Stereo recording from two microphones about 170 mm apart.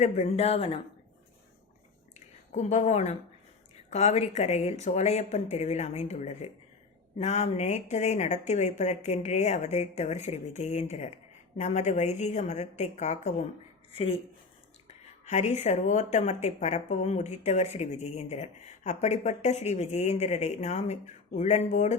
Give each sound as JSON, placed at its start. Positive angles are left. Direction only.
{"t": 0.0, "sound": "speech", "side_deg": 40}
{"t": 2.1, "sound": "a sound", "side_deg": 45}
{"t": 3.8, "sound": "speech", "side_deg": 40}